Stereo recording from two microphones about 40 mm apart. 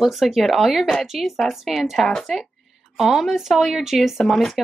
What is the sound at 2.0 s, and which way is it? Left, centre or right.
Speech, centre.